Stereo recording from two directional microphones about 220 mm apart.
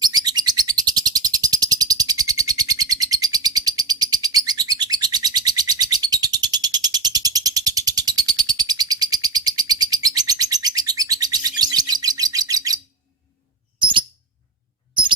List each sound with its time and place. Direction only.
0.0 s bird: 20° right (ahead or behind)